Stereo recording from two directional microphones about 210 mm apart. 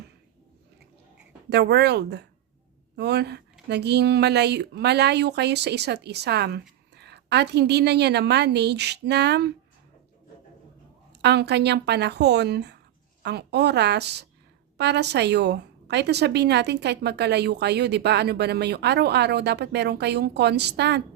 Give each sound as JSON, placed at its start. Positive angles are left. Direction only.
{"t": 1.5, "sound": "a woman's voice", "side_deg": -50}
{"t": 11.2, "sound": "a woman's voice", "side_deg": -55}